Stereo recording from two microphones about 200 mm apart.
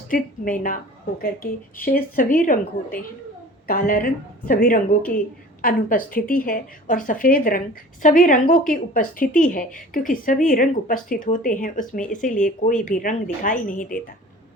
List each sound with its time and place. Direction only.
0.1 s a woman's voice: 45° left (ahead or behind)